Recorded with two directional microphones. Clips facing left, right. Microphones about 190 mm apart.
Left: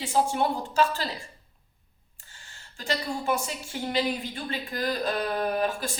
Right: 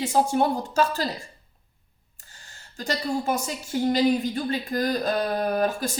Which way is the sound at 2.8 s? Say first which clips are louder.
Right 3 dB; 40° right (ahead or behind).